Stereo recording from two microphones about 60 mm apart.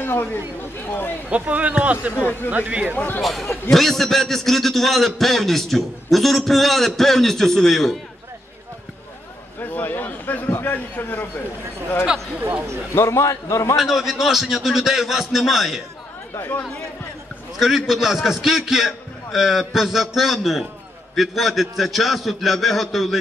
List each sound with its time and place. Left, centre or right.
0.0 s speech: left
1.3 s speech: right
3.2 s a man's voice: centre
9.6 s a sound: left
12.9 s a man's voice: left
13.7 s a man's voice: centre
16.3 s speech: left
17.6 s a man's voice: centre